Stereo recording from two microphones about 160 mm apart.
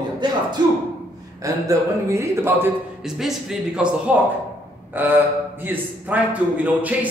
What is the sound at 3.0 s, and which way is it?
A man's voice, 5° right (ahead or behind).